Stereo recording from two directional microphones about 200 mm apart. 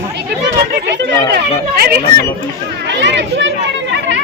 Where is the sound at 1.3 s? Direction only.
50° right (ahead or behind).